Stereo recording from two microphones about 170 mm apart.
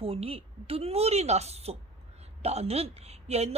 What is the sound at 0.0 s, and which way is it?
A woman's voice, 35° right (ahead or behind).